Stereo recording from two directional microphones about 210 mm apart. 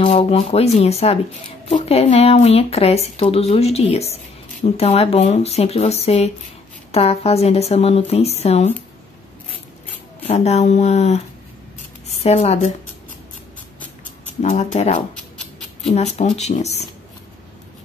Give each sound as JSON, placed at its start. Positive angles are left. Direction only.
{"t": 0.0, "sound": "speech", "side_deg": 25}
{"t": 10.2, "sound": "speech", "side_deg": 30}
{"t": 14.2, "sound": "speech", "side_deg": 35}